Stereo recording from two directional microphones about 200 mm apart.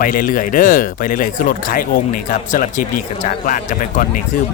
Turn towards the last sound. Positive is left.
turn(degrees=40)  # may be behind; listen again after turning